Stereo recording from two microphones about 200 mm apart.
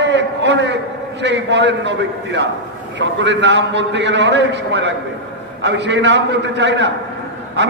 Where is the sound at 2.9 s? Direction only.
65° right (ahead or behind).